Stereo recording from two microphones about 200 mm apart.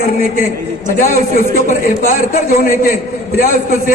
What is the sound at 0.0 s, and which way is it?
A man's voice, 45° left (ahead or behind).